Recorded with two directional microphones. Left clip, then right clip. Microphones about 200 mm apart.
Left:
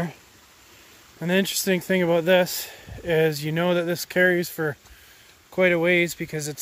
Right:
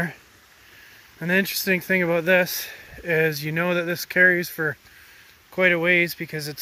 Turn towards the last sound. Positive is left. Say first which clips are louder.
# even
turn(degrees=15)  # may be behind; listen again after turning